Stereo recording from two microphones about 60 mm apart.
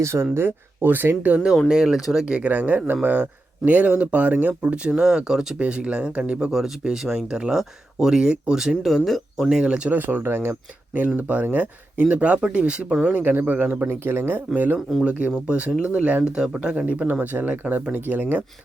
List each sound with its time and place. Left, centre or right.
0.0 s speech: right
1.6 s speech: centre
2.3 s speech: right; by 5.5 s centre
5.5 s speech: centre
6.5 s speech: centre
9.5 s speech: centre
9.9 s speech: right; by 13.1 s centre
13.1 s speech: right
15.4 s speech: centre